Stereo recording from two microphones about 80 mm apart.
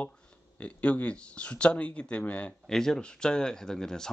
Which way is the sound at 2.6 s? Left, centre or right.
Centre.